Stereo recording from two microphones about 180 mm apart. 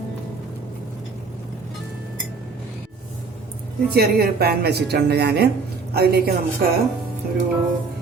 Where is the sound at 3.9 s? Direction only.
60° right (ahead or behind).